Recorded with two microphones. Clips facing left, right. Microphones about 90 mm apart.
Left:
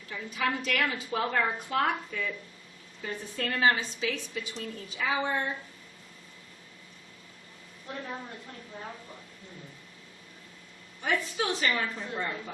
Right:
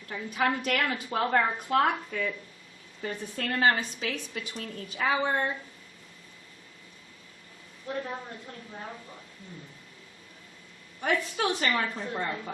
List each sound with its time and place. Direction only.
0.1 s a woman's voice: 50° right (ahead or behind)
11.0 s a woman's voice: 50° right (ahead or behind)